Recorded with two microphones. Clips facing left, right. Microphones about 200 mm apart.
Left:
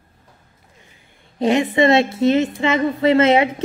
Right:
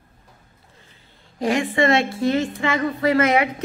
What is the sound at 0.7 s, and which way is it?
A woman's voice, 20° left (ahead or behind).